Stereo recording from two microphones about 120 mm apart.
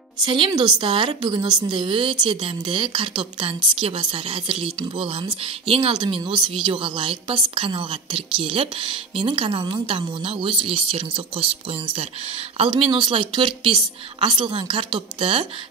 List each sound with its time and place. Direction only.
0.2 s a woman's voice: 45° right (ahead or behind)